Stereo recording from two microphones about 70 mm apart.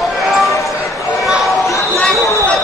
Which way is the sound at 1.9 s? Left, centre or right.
Centre.